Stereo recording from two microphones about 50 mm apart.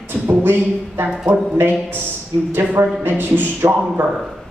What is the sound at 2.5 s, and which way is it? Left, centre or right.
Speech, right.